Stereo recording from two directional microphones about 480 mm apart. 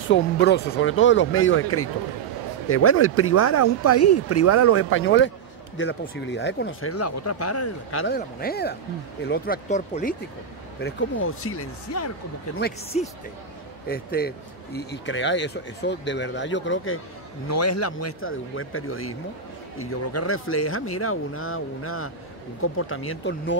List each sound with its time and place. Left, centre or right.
0.1 s speech: left